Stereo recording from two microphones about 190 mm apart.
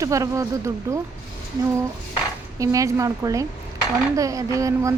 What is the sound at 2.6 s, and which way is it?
Speech, 15° right (ahead or behind).